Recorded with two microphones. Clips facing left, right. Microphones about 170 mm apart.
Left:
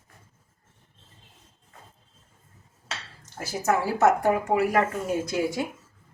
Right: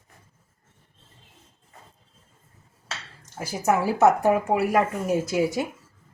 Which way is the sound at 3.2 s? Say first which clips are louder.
Right 2 dB; 15° right (ahead or behind).